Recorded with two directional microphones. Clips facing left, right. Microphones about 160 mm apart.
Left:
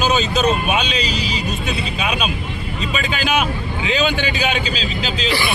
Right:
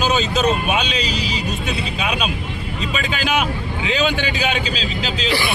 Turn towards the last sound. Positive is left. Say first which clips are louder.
# left 1 dB
turn(degrees=0)  # may be behind; listen again after turning